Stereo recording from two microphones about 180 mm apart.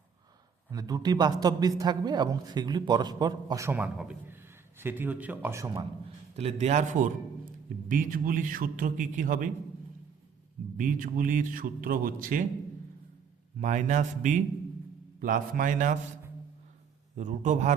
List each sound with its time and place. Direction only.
0.7 s a man's voice: 20° right (ahead or behind)
6.3 s a man's voice: 35° right (ahead or behind)
10.8 s a man's voice: 50° right (ahead or behind)
13.6 s a man's voice: 45° right (ahead or behind)
17.2 s a man's voice: 45° right (ahead or behind)